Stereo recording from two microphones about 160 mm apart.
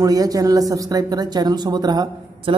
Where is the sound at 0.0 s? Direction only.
20° right (ahead or behind).